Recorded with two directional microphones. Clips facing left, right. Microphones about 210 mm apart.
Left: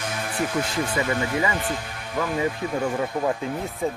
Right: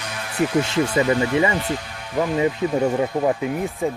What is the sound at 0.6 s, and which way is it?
Speech, 25° right (ahead or behind).